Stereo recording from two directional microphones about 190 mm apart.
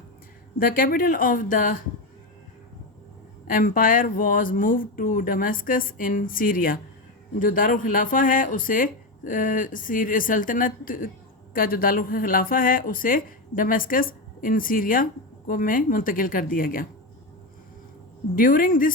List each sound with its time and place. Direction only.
0.6 s speech: 45° left (ahead or behind)
3.4 s speech: 45° left (ahead or behind)
18.3 s speech: 45° left (ahead or behind)